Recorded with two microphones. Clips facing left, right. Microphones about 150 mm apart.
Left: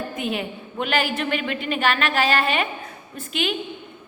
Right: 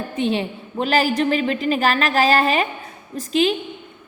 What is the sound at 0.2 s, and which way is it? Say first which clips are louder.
A woman's voice: right 8 dB; 30° right (ahead or behind).